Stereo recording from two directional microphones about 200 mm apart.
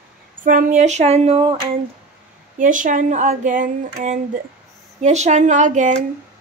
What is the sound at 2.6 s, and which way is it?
Speech, 40° right (ahead or behind).